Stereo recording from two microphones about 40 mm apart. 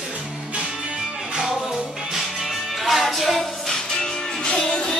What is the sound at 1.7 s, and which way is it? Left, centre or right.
Music, centre.